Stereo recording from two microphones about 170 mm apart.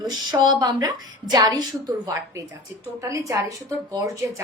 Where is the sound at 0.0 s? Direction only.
25° right (ahead or behind).